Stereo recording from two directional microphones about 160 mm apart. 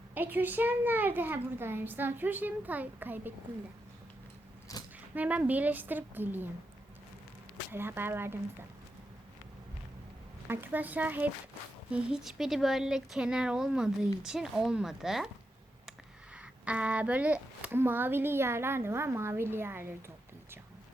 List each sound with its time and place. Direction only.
0.1 s a woman's voice: 10° right (ahead or behind)
4.7 s a sound: 20° left (ahead or behind)
5.1 s a woman's voice: 10° right (ahead or behind)
7.7 s a woman's voice: 15° right (ahead or behind)
10.5 s a woman's voice: 15° right (ahead or behind)